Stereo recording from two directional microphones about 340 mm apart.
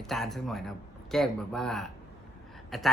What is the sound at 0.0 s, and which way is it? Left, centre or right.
Speech, centre.